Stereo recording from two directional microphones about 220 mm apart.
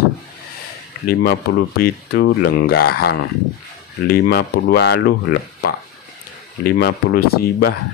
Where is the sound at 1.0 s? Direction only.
45° left (ahead or behind).